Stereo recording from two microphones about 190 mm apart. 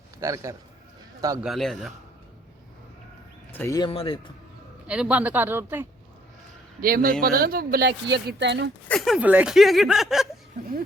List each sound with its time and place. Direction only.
0.2 s speech: 15° right (ahead or behind)
1.4 s speech: centre (ahead or behind)
3.5 s speech: 10° left (ahead or behind)
3.8 s speech: 25° left (ahead or behind)
4.9 s speech: 5° right (ahead or behind)
6.8 s speech: 50° right (ahead or behind); by 8.7 s 65° right (ahead or behind)
8.9 s speech: centre (ahead or behind)